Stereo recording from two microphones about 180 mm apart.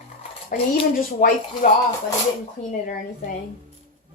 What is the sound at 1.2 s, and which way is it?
Speech, 45° left (ahead or behind).